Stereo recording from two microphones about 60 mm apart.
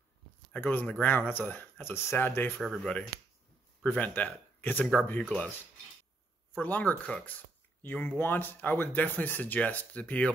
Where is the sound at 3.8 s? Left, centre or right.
Left.